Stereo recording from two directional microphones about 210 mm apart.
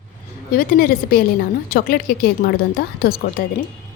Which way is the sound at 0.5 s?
45° left (ahead or behind).